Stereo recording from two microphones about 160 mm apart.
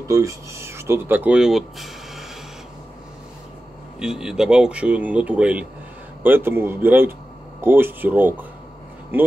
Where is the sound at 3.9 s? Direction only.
5° right (ahead or behind).